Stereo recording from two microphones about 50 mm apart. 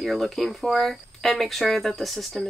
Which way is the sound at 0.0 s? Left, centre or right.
Centre.